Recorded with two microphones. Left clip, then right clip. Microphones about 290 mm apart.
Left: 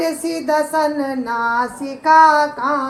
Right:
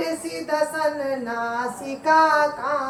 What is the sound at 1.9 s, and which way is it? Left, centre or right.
Female singing, centre.